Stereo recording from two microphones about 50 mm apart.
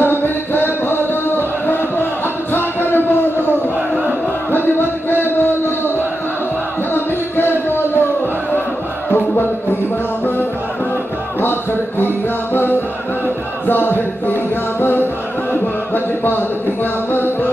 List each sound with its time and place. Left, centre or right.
0.0 s music: left
5.2 s a sound: left
6.9 s music: left
9.1 s music: left
13.7 s music: left